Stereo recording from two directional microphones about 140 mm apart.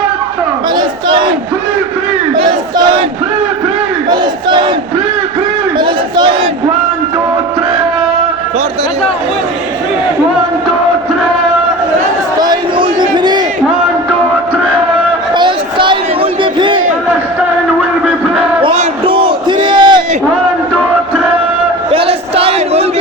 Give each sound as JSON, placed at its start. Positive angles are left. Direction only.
{"t": 0.8, "sound": "battle cry", "side_deg": -35}
{"t": 4.1, "sound": "battle cry", "side_deg": -35}
{"t": 5.8, "sound": "battle cry", "side_deg": -35}
{"t": 12.4, "sound": "a sound", "side_deg": -35}
{"t": 15.4, "sound": "a sound", "side_deg": -35}
{"t": 19.0, "sound": "crowd", "side_deg": -40}
{"t": 21.9, "sound": "crowd", "side_deg": -45}